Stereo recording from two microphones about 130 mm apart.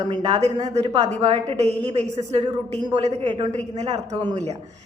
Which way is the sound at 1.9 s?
60° right (ahead or behind).